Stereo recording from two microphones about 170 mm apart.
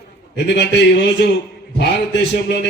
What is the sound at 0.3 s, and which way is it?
Speech, 85° left.